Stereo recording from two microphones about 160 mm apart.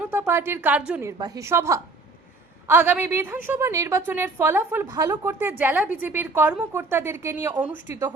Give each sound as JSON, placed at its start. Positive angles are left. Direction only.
{"t": 0.0, "sound": "a woman's voice", "side_deg": -10}
{"t": 1.2, "sound": "a woman's voice", "side_deg": -20}